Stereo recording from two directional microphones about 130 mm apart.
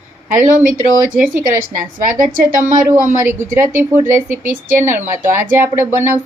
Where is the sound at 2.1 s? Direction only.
90° right.